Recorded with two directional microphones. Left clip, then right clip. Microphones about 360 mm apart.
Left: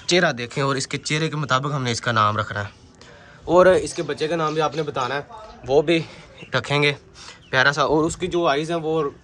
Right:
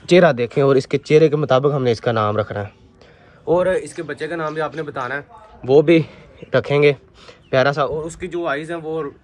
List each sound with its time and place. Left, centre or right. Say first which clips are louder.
0.0 s speech: right 6 dB; centre
3.5 s speech: left 4 dB; centre
5.7 s speech: right 6 dB; centre
6.5 s speech: right 5 dB; centre